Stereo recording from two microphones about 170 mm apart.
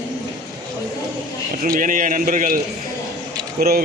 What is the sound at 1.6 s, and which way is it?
Speech, 50° right (ahead or behind).